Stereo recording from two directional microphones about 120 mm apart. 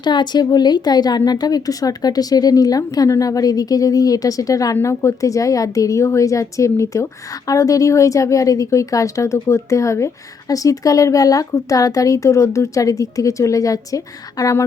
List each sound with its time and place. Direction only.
0.0 s a woman's voice: 40° left (ahead or behind)